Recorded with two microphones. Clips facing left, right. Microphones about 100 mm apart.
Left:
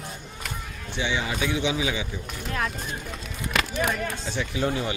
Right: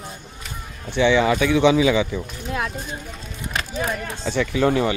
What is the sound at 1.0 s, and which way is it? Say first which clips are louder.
A man's voice: right 11 dB; 80° right.